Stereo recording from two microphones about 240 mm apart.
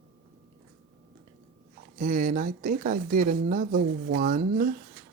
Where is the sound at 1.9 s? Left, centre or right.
Right.